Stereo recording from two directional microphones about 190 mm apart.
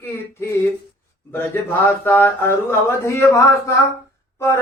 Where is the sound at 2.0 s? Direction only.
10° left (ahead or behind).